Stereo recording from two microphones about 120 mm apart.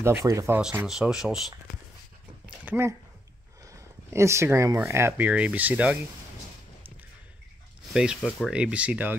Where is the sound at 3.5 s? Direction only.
25° right (ahead or behind).